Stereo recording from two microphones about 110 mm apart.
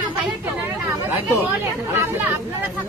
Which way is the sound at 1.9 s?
20° right (ahead or behind).